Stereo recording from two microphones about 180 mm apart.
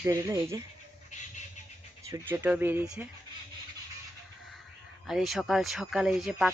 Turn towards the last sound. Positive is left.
turn(degrees=-5)  # may be behind; listen again after turning